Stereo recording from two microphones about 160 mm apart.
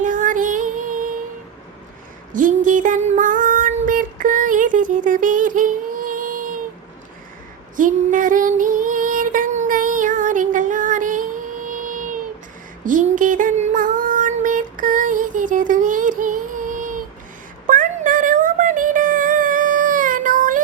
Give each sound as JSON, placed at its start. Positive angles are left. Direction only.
{"t": 0.0, "sound": "child singing", "side_deg": -55}
{"t": 2.3, "sound": "child singing", "side_deg": -55}
{"t": 7.8, "sound": "female singing", "side_deg": -55}
{"t": 12.8, "sound": "child singing", "side_deg": -55}
{"t": 17.7, "sound": "a sound", "side_deg": -55}